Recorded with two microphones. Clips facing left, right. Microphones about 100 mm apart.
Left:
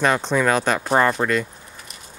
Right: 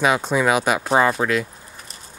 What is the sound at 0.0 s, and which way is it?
Speech, 10° right (ahead or behind).